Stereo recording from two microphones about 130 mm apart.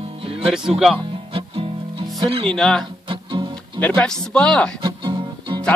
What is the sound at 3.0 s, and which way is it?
Music, 40° right (ahead or behind).